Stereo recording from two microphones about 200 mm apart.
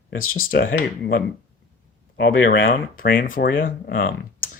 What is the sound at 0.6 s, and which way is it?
Speech, 70° left (ahead or behind).